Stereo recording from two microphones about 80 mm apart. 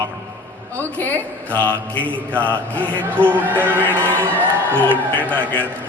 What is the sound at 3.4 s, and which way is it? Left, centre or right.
Speech, right.